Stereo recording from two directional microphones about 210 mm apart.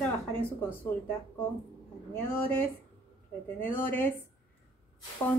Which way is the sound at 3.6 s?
10° left (ahead or behind).